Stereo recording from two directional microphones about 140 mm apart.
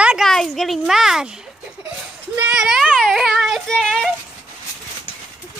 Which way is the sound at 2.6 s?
5° right (ahead or behind).